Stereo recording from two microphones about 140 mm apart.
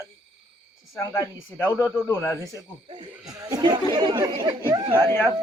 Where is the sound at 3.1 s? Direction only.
10° right (ahead or behind).